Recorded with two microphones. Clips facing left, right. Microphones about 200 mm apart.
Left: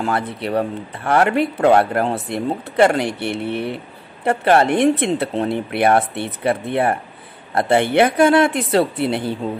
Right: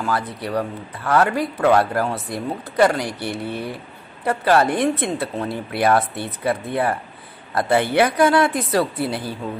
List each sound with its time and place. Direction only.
0.0 s speech: 25° left (ahead or behind)